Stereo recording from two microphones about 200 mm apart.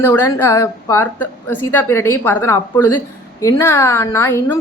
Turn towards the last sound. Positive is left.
turn(degrees=15)  # may be behind; listen again after turning